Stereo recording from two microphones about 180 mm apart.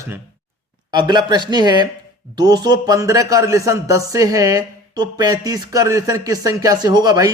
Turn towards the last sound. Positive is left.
turn(degrees=-20)  # may be behind; listen again after turning